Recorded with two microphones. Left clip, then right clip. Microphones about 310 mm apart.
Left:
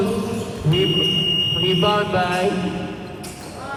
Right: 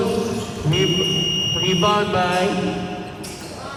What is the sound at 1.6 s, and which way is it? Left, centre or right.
Fire alarm, right.